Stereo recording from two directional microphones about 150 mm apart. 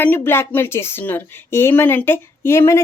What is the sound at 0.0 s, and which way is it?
A woman's voice, 15° left (ahead or behind).